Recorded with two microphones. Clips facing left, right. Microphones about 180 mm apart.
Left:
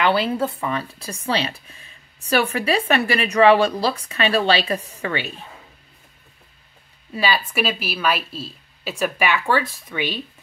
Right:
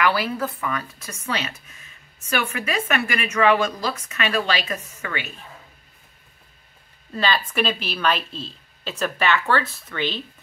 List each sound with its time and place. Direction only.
0.0 s speech: 25° left (ahead or behind)
7.1 s a woman's voice: 10° left (ahead or behind)